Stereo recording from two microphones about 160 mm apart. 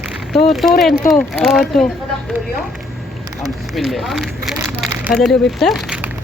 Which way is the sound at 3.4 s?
Centre (ahead or behind).